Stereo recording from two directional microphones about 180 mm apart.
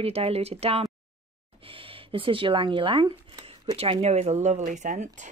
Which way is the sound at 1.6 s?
30° right (ahead or behind).